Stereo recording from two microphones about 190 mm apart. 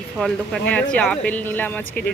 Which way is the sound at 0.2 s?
5° left (ahead or behind).